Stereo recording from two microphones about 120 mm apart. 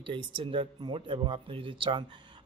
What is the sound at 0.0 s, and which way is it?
Speech, 45° right (ahead or behind).